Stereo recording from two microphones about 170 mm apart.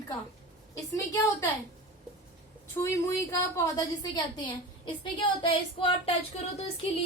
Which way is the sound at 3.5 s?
20° left (ahead or behind).